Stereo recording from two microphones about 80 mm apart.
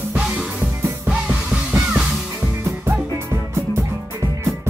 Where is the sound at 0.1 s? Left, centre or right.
Centre.